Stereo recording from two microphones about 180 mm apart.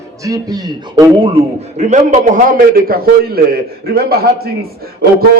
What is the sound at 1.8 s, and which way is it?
A man's voice, 40° right (ahead or behind).